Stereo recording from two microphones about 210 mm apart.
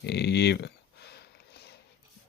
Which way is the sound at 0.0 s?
50° left (ahead or behind).